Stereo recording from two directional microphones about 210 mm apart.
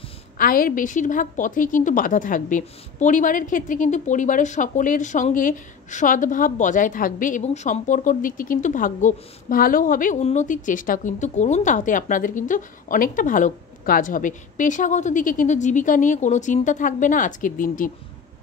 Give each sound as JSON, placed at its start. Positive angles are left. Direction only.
{"t": 0.4, "sound": "a woman's voice", "side_deg": 45}